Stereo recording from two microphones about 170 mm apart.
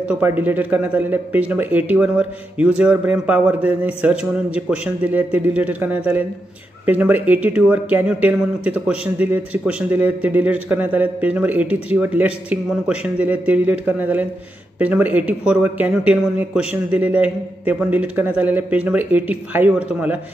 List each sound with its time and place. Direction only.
0.1 s speech: 10° right (ahead or behind)